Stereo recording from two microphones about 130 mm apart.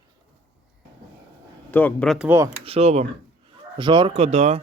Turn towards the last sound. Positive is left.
turn(degrees=-60)  # may be behind; listen again after turning